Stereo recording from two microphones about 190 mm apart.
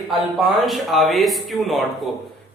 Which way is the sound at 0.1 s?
Centre (ahead or behind).